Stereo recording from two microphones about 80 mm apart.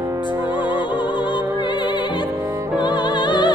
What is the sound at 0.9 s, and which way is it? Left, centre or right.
Music, left.